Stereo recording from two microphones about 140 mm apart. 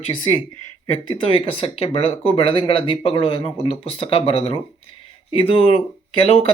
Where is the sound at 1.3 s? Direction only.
40° left (ahead or behind).